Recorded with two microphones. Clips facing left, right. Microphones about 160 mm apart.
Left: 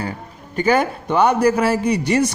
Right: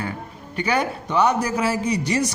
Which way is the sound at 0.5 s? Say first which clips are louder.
Left 5 dB; 45° left (ahead or behind).